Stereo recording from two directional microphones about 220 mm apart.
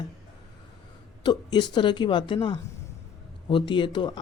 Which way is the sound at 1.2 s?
20° left (ahead or behind).